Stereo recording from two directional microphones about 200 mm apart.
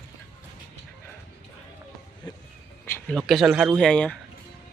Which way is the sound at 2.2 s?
20° left (ahead or behind).